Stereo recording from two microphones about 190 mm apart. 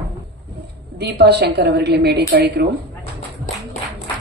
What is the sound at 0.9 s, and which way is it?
A woman's voice, 55° right (ahead or behind).